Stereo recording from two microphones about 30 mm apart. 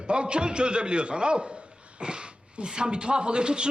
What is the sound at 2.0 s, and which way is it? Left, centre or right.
Dog, right.